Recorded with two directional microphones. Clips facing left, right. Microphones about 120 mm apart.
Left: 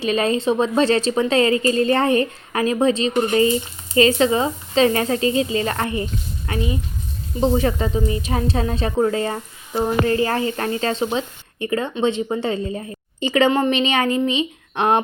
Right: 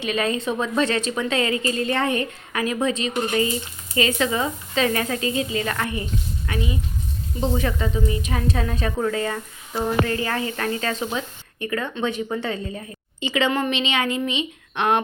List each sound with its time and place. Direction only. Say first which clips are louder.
0.0 s a woman's voice: left 4 dB; 35° left (ahead or behind)
13.1 s a woman's voice: left 5 dB; 45° left (ahead or behind)